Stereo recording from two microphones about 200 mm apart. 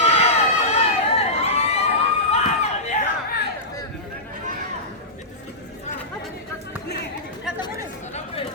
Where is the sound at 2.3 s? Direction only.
35° left (ahead or behind).